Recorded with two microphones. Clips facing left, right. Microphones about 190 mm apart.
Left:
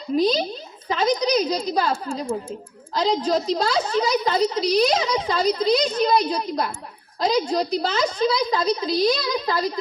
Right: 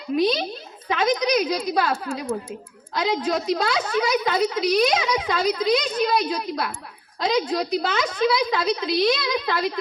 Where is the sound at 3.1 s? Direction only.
30° left (ahead or behind).